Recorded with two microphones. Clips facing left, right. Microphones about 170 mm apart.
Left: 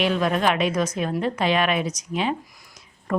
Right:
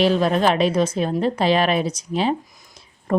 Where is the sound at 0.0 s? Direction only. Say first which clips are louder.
Right 4 dB; 30° right (ahead or behind).